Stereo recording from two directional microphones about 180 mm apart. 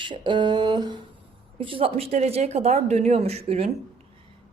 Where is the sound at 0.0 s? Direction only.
25° right (ahead or behind).